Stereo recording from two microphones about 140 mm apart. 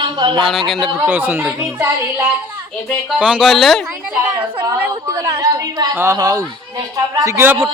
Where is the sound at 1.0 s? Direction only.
15° right (ahead or behind).